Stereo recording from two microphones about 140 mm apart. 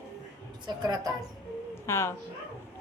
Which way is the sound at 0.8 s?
30° right (ahead or behind).